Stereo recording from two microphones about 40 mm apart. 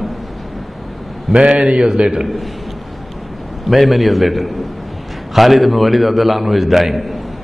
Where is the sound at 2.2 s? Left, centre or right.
Centre.